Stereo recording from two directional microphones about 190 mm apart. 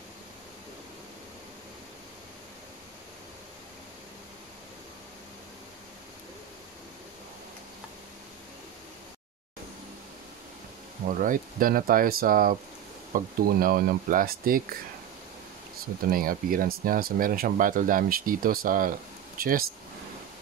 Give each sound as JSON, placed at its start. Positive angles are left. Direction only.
{"t": 11.1, "sound": "speech", "side_deg": -45}
{"t": 16.1, "sound": "speech", "side_deg": -50}
{"t": 19.3, "sound": "a sound", "side_deg": -50}